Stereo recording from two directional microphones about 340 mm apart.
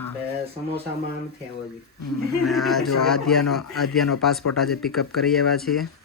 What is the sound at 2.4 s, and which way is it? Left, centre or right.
Speech, centre.